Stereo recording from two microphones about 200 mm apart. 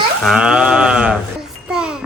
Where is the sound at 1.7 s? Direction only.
5° right (ahead or behind).